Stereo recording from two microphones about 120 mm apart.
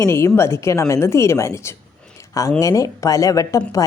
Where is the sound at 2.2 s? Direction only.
25° left (ahead or behind).